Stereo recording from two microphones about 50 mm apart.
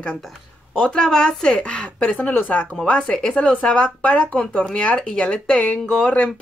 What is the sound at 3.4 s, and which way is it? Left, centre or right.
A woman's voice, left.